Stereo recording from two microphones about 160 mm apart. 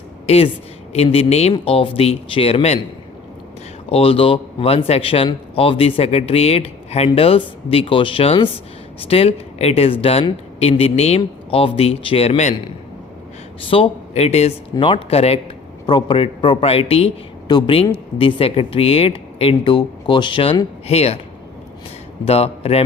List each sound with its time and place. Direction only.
0.3 s a man's voice: 40° left (ahead or behind)
3.8 s a man's voice: 35° left (ahead or behind)
13.7 s a man's voice: 35° left (ahead or behind)
22.2 s a man's voice: 40° left (ahead or behind)